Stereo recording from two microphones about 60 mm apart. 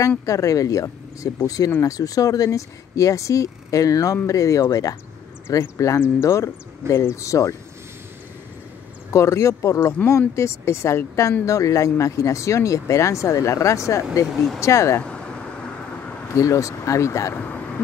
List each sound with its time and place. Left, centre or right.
0.2 s speech: left
9.1 s speech: left
14.3 s speech: centre
14.6 s speech: left
15.0 s vehicle: centre
16.3 s speech: left